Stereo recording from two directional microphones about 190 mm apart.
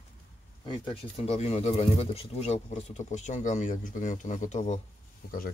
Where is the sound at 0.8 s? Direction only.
30° left (ahead or behind).